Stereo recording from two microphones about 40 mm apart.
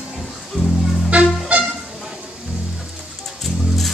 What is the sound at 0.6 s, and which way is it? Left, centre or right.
Speech, left.